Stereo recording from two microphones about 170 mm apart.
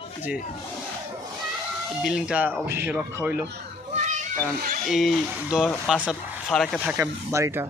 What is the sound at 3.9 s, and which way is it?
Children playing, 45° right (ahead or behind).